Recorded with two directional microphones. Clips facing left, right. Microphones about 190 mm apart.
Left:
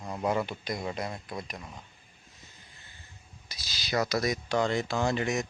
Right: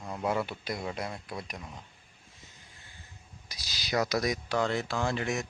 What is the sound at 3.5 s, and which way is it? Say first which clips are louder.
Speech: even; 15° right (ahead or behind).